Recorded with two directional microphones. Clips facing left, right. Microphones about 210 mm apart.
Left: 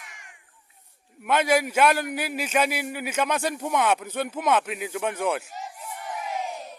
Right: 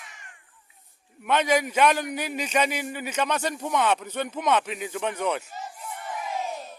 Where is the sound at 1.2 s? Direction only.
10° left (ahead or behind).